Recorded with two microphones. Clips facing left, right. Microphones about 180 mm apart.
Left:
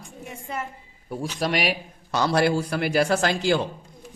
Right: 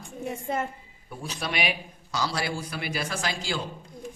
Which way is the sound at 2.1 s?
60° left (ahead or behind).